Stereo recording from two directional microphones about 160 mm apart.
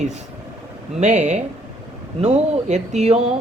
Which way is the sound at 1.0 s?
45° right (ahead or behind).